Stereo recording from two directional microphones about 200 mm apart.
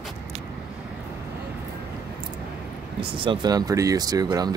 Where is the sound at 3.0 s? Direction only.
25° right (ahead or behind).